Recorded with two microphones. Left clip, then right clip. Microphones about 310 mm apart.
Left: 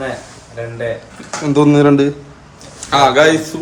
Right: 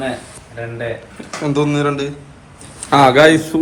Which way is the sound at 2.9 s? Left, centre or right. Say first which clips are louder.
Right 1 dB; right.